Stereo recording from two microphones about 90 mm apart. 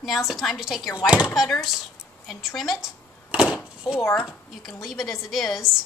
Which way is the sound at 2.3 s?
Centre (ahead or behind).